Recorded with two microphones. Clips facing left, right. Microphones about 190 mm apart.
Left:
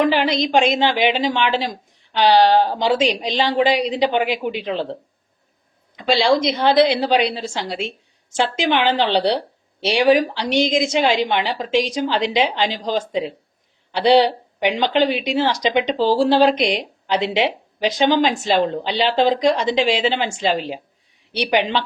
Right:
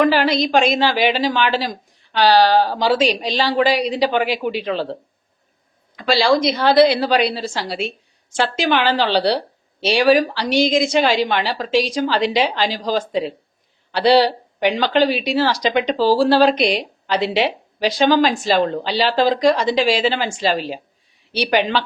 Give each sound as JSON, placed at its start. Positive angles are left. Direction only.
{"t": 0.1, "sound": "a woman's voice", "side_deg": 20}
{"t": 6.0, "sound": "a woman's voice", "side_deg": 20}